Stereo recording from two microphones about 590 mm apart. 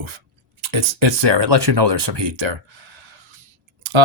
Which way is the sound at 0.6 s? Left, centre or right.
Right.